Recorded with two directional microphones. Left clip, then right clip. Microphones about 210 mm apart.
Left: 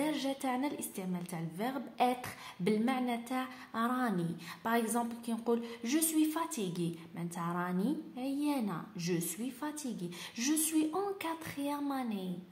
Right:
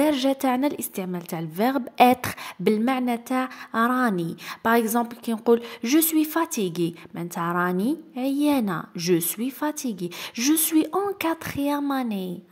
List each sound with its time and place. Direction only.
0.0 s a woman's voice: 45° right (ahead or behind)